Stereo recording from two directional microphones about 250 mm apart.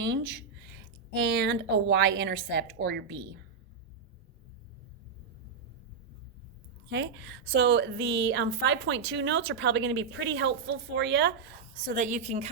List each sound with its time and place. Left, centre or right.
0.0 s speech: right
6.9 s a woman's voice: right
11.9 s a woman's voice: right